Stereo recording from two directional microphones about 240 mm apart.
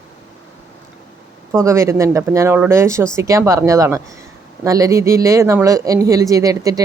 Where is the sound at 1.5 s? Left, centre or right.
Centre.